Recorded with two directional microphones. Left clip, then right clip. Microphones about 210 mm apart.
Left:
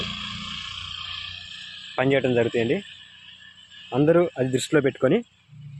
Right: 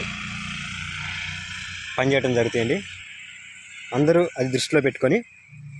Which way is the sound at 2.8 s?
30° left (ahead or behind).